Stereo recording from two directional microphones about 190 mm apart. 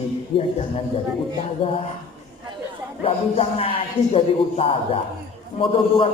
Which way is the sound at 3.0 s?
30° left (ahead or behind).